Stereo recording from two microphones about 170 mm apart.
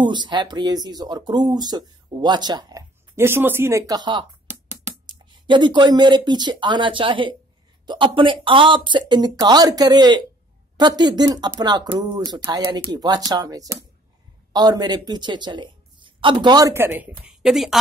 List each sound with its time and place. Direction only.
0.0 s speech: 25° right (ahead or behind); by 17.7 s centre (ahead or behind)